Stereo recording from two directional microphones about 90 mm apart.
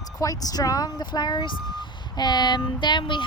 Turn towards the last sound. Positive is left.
turn(degrees=60)  # may be behind; listen again after turning